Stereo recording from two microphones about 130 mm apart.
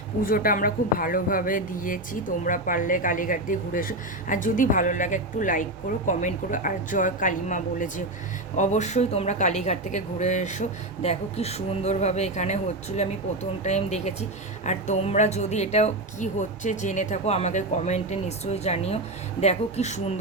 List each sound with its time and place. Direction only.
0.2 s a woman's voice: 90° left; by 10.6 s 65° left (ahead or behind)
11.0 s speech: 55° left (ahead or behind)
13.7 s speech: 60° left (ahead or behind)